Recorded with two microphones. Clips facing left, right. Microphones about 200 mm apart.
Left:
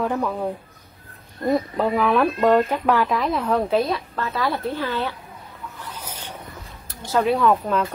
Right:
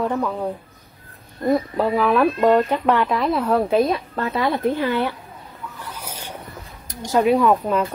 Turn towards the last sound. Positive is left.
turn(degrees=-10)  # may be behind; listen again after turning